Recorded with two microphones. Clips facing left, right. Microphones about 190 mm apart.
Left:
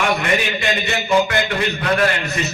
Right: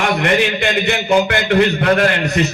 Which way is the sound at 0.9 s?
60° right (ahead or behind).